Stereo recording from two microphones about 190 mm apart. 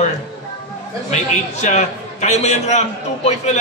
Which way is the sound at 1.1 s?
40° left (ahead or behind).